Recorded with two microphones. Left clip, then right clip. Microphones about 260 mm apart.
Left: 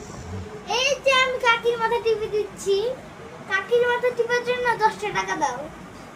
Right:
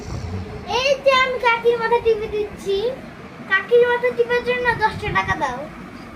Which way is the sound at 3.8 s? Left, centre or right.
Centre.